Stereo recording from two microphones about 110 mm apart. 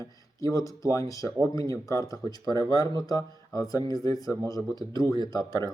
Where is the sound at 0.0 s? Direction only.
30° left (ahead or behind).